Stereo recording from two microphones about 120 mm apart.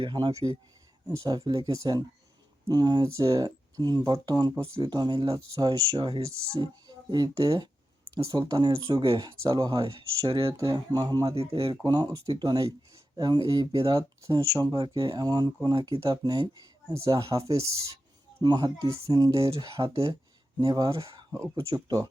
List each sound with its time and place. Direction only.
0.0 s speech: 40° right (ahead or behind)
4.8 s speech: 35° right (ahead or behind)
10.2 s speech: 50° right (ahead or behind)
10.6 s speech: 35° right (ahead or behind)
11.3 s speech: 55° right (ahead or behind)
11.8 s speech: 35° right (ahead or behind)